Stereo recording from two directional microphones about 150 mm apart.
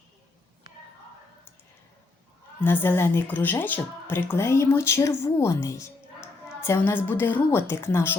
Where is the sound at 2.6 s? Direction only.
15° left (ahead or behind).